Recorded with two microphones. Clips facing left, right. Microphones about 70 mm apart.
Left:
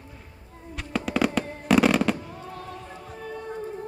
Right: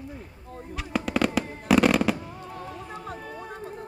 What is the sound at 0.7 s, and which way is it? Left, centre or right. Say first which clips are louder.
Fireworks: even; centre.